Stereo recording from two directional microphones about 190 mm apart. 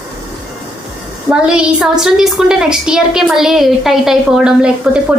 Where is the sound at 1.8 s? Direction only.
Centre (ahead or behind).